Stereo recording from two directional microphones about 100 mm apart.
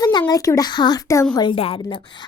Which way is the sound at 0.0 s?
45° left (ahead or behind).